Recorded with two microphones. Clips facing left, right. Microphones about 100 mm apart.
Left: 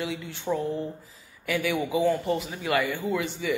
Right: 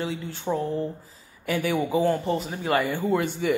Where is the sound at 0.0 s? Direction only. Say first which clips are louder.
Right 2 dB; 35° right (ahead or behind).